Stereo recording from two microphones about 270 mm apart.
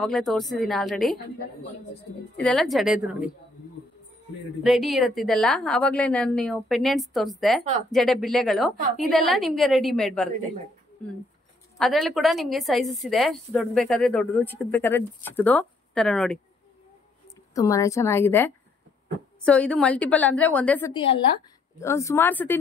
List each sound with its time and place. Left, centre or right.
0.0 s a woman's voice: centre
2.3 s a woman's voice: centre
4.6 s a woman's voice: centre
11.8 s a woman's voice: centre
17.6 s a woman's voice: centre
20.9 s a woman's voice: centre